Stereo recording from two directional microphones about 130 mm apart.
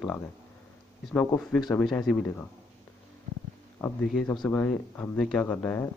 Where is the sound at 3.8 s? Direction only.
20° left (ahead or behind).